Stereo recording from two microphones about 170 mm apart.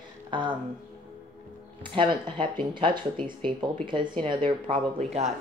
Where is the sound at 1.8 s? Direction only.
30° right (ahead or behind).